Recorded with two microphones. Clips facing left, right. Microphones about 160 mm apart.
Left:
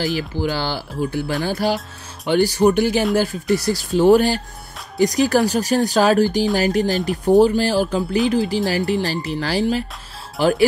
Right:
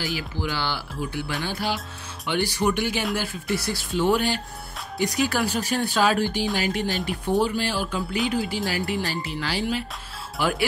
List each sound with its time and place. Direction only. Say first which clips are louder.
0.0 s speech: left 7 dB; 40° left (ahead or behind)